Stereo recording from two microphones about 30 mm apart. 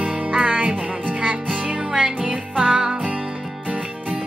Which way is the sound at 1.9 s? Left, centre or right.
Right.